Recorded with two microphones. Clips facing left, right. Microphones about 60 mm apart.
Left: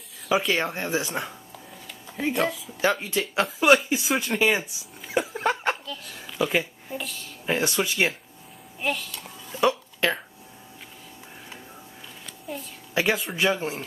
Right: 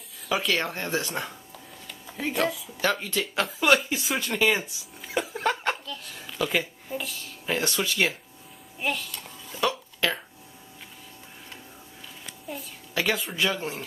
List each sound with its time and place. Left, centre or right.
0.3 s speech: centre
2.8 s speech: centre
4.0 s a child's voice: centre
4.4 s speech: centre
5.2 s chuckle: centre
5.5 s chuckle: centre
5.9 s a child's voice: centre
7.4 s speech: centre
8.7 s a child's voice: centre
10.0 s speech: left
12.5 s a woman's voice: centre
12.9 s speech: centre